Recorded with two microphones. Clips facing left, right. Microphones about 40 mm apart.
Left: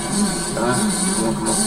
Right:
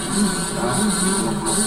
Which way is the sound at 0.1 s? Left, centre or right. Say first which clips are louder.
Right 1 dB; right.